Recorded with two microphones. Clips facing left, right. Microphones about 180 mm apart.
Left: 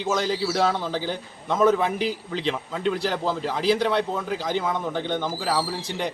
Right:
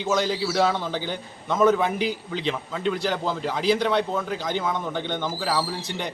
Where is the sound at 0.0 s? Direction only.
Centre (ahead or behind).